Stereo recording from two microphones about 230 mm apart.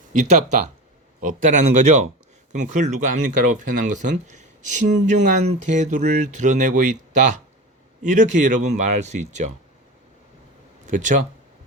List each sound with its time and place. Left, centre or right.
0.1 s speech: right
10.8 s speech: right